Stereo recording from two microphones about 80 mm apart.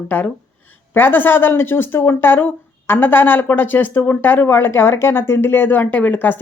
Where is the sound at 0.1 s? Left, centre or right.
Left.